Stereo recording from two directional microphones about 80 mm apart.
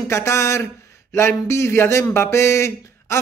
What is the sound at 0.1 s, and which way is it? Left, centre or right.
Speech, left.